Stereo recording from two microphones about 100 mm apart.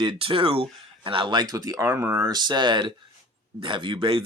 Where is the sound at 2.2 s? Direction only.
45° right (ahead or behind).